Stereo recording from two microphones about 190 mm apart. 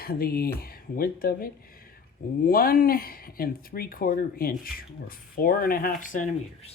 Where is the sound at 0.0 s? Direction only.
50° left (ahead or behind).